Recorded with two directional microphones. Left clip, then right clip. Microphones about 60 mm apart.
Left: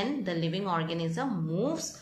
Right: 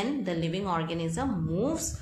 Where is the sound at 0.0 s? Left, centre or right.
Right.